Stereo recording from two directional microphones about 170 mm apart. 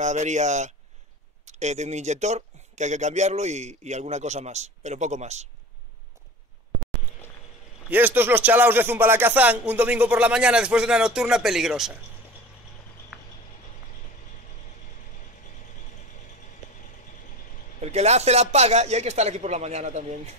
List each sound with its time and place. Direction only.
0.0 s speech: 45° right (ahead or behind)
7.9 s speech: 10° right (ahead or behind)
13.1 s a sound: centre (ahead or behind)
17.9 s speech: 40° right (ahead or behind)